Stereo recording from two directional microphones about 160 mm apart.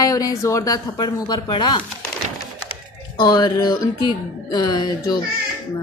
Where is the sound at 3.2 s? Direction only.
30° left (ahead or behind).